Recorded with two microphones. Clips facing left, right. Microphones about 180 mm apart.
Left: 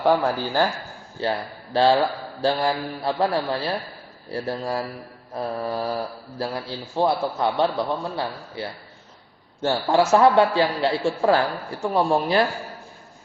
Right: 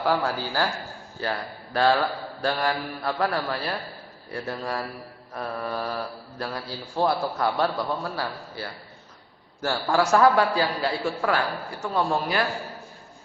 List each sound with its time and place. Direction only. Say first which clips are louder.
0.0 s a man's voice: left 5 dB; 20° left (ahead or behind)